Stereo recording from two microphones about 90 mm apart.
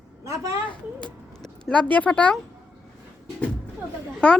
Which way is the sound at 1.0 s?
5° left (ahead or behind).